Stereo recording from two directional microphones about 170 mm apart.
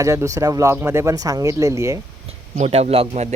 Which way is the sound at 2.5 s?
40° right (ahead or behind).